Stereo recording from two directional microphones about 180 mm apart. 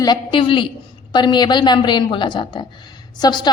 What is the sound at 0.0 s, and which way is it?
A woman's voice, 25° left (ahead or behind).